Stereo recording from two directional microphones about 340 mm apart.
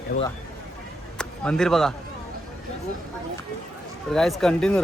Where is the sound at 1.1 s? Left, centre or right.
Centre.